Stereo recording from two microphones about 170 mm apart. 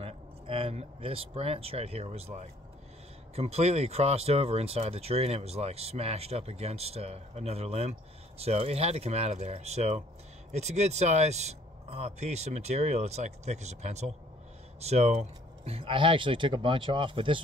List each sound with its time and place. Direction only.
0.0 s speech: 35° right (ahead or behind)